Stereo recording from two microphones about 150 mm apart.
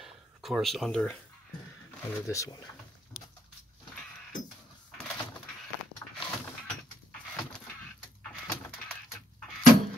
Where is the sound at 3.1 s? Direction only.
10° left (ahead or behind).